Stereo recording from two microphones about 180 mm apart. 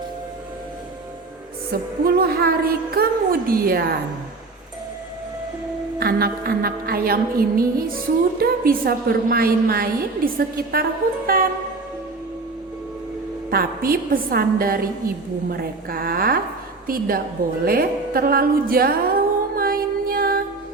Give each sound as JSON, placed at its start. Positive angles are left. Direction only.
{"t": 1.7, "sound": "a woman's voice", "side_deg": -60}
{"t": 6.0, "sound": "a woman's voice", "side_deg": -60}
{"t": 11.3, "sound": "music", "side_deg": -55}
{"t": 13.5, "sound": "a woman's voice", "side_deg": -55}
{"t": 19.5, "sound": "music", "side_deg": -55}